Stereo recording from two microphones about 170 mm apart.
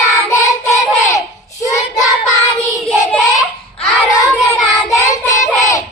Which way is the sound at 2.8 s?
Centre (ahead or behind).